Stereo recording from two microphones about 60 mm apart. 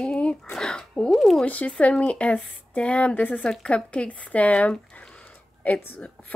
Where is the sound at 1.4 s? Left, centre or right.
Left.